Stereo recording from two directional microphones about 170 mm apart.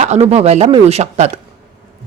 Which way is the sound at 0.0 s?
40° right (ahead or behind).